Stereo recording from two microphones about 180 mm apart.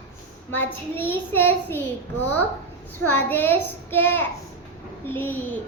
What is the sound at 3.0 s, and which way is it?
Speech, 10° left (ahead or behind).